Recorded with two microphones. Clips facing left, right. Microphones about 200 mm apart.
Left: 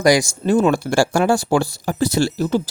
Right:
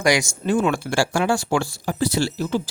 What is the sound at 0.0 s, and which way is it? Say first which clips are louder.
Speech: left 5 dB; 35° left (ahead or behind).